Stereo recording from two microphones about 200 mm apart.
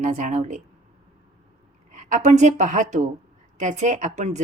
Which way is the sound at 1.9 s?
40° right (ahead or behind).